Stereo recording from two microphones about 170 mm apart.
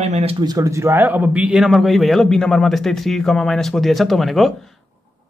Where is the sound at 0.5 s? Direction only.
20° right (ahead or behind); by 4.7 s centre (ahead or behind).